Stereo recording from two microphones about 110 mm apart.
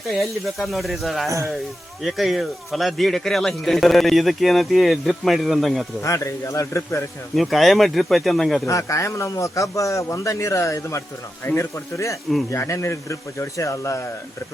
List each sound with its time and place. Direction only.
0.0 s speech: centre (ahead or behind)
6.0 s a man's voice: 30° left (ahead or behind)
7.3 s speech: centre (ahead or behind)
8.6 s a man's voice: 30° left (ahead or behind)